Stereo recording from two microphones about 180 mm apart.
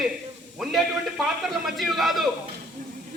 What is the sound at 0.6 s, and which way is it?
A man's voice, centre (ahead or behind).